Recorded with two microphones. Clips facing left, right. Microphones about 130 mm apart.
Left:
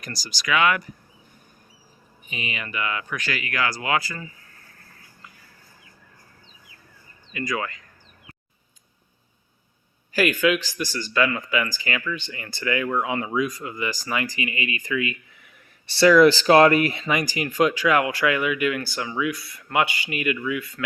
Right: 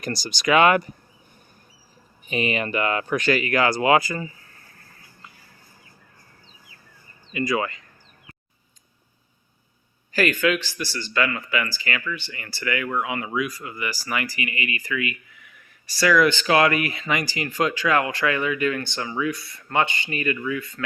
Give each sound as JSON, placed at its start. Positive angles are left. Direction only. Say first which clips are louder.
{"t": 0.2, "sound": "speech", "louder": "right 5 dB", "side_deg": -60}
{"t": 0.4, "sound": "speech", "louder": "right 5 dB", "side_deg": -35}
{"t": 2.3, "sound": "speech", "louder": "right 8 dB", "side_deg": -45}
{"t": 3.2, "sound": "speech", "louder": "right 8 dB", "side_deg": -30}
{"t": 7.3, "sound": "speech", "louder": "right 4 dB", "side_deg": -10}
{"t": 10.1, "sound": "speech", "louder": "left 1 dB", "side_deg": 10}
{"t": 17.2, "sound": "speech", "louder": "left 4 dB", "side_deg": 15}